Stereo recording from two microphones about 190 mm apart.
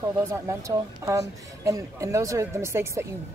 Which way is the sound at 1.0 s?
15° right (ahead or behind).